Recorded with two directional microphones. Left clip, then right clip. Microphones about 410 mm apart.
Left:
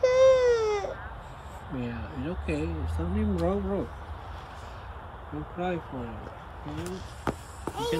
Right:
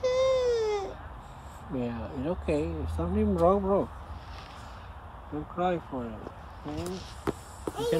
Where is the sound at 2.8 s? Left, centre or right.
Right.